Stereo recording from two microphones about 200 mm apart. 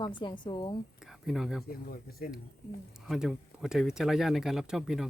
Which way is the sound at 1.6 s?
50° left (ahead or behind).